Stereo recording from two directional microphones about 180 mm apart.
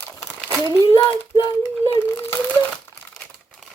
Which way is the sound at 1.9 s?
15° left (ahead or behind).